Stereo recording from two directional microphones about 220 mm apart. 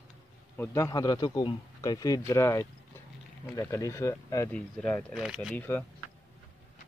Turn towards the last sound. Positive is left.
turn(degrees=0)  # may be behind; listen again after turning